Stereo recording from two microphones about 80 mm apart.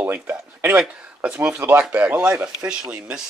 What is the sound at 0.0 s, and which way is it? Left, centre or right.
Speech, right.